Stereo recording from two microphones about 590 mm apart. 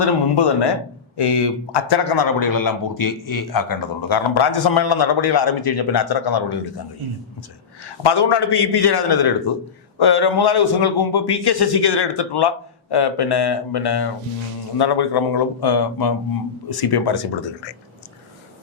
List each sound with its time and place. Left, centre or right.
0.0 s a man's voice: left
8.0 s a man's voice: left